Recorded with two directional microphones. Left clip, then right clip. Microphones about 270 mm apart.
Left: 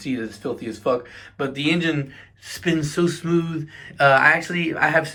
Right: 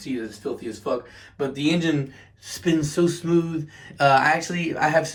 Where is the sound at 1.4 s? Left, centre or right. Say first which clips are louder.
Left 1 dB; centre.